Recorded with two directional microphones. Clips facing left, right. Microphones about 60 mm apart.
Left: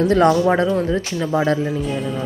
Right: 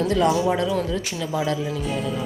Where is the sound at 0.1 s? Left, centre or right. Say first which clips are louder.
Left 5 dB; left.